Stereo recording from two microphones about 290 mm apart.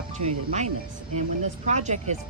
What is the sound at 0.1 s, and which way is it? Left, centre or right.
Speech, right.